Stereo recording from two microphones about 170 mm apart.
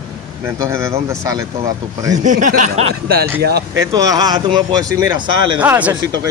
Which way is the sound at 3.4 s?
70° right (ahead or behind).